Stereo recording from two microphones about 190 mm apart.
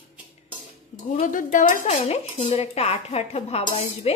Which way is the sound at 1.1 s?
45° left (ahead or behind).